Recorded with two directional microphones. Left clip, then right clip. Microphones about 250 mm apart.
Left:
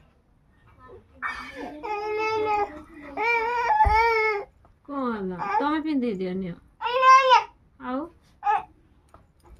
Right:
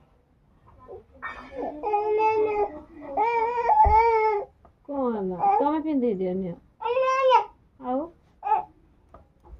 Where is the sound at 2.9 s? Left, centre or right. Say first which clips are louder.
Right 1 dB; centre.